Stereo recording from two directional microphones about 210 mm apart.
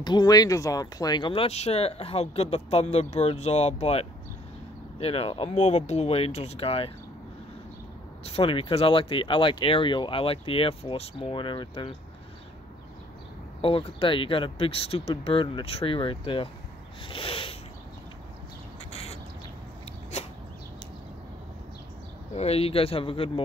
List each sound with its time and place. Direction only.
0.0 s speech: 20° left (ahead or behind)
8.3 s speech: 25° left (ahead or behind)
13.6 s speech: 25° left (ahead or behind)
17.1 s a sound: 25° left (ahead or behind)
18.9 s duck: 30° left (ahead or behind)
20.1 s a sound: 30° left (ahead or behind)
22.3 s speech: 30° left (ahead or behind)